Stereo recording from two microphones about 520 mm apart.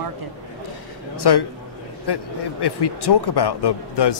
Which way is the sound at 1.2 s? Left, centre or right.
Left.